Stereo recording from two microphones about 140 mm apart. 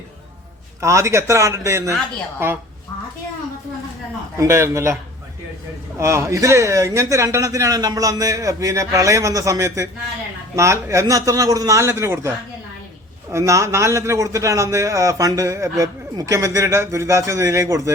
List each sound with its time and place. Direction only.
0.8 s a man's voice: 20° right (ahead or behind)
4.4 s a man's voice: 20° right (ahead or behind)
6.0 s a man's voice: 20° right (ahead or behind)
13.3 s a man's voice: 20° right (ahead or behind)